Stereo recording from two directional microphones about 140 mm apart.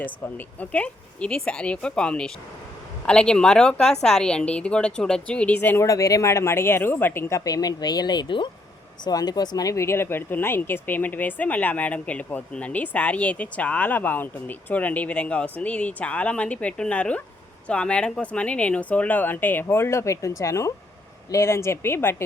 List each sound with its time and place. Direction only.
0.0 s a woman's voice: 10° left (ahead or behind)